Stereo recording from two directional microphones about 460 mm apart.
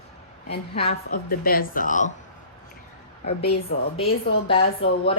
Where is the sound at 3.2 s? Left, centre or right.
Centre.